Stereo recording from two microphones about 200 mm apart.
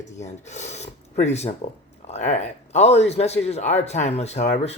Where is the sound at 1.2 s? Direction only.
35° left (ahead or behind).